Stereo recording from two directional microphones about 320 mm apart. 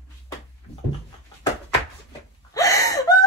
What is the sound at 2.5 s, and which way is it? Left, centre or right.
Gasp, centre.